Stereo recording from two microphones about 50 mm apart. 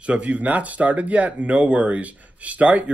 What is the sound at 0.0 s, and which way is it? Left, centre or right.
Speech, right.